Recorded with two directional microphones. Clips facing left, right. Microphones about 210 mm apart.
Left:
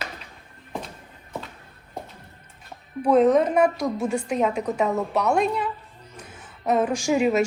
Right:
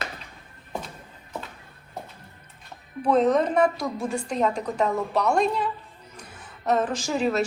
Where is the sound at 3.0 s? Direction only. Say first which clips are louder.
Left 3 dB; 10° left (ahead or behind).